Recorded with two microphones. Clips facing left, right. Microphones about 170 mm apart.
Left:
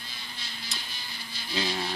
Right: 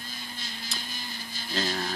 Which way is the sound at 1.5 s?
Centre (ahead or behind).